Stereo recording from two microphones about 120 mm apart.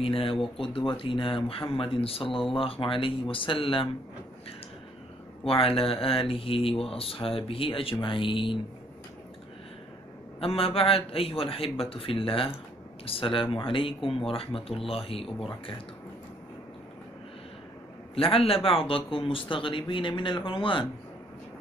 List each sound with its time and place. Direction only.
0.0 s speech: 50° left (ahead or behind)
5.4 s speech: 50° left (ahead or behind)
10.4 s speech: 55° left (ahead or behind)
18.1 s speech: 50° left (ahead or behind)